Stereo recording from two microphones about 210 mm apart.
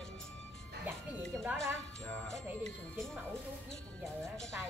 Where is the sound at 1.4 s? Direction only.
15° right (ahead or behind).